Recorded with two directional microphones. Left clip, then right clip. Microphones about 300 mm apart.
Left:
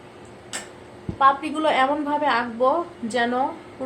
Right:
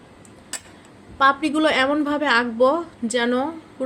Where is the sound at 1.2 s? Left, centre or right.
Right.